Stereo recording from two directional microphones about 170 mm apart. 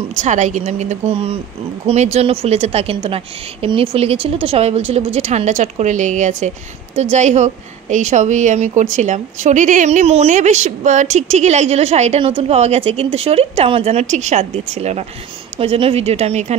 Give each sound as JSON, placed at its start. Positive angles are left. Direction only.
{"t": 0.1, "sound": "a woman's voice", "side_deg": -45}